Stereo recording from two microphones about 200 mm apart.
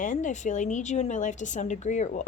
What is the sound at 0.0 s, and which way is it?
A woman's voice, 40° left (ahead or behind).